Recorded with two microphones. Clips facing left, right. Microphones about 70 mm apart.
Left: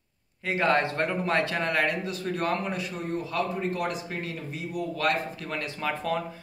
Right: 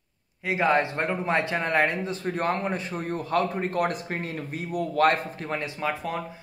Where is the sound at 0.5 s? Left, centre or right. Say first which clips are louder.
Right 1 dB; centre.